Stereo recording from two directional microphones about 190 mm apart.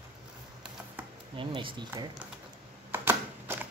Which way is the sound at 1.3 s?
25° right (ahead or behind).